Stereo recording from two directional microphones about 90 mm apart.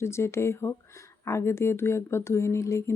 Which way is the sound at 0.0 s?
30° left (ahead or behind).